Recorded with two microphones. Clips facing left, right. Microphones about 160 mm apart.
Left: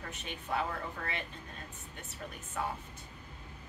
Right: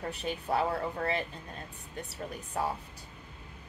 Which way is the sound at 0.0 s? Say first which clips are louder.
Right 8 dB; 35° right (ahead or behind).